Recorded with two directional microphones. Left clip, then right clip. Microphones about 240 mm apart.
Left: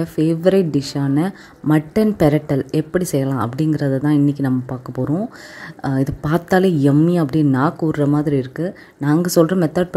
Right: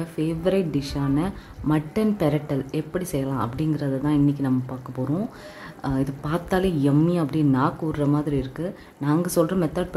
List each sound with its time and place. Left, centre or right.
0.0 s speech: left